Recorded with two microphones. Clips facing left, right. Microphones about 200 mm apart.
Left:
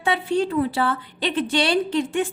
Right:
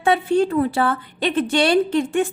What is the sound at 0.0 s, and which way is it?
A woman's voice, 50° right (ahead or behind).